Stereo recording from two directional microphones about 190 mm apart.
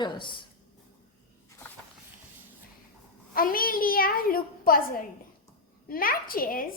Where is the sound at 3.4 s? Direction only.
50° left (ahead or behind).